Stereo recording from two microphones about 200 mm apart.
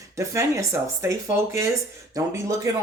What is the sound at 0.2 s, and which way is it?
Speech, 15° right (ahead or behind).